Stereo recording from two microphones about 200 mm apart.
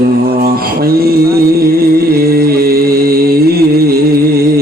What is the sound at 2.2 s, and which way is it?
Music, 50° right (ahead or behind).